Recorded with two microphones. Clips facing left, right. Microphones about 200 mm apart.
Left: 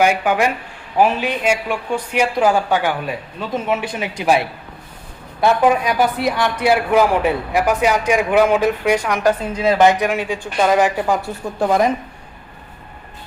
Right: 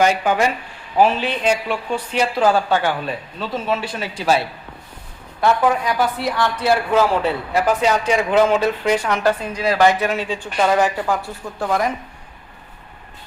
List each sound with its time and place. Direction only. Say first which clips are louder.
0.0 s a man's voice: left 1 dB; 10° left (ahead or behind)